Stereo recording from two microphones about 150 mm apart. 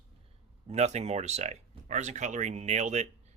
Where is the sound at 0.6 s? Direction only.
45° right (ahead or behind).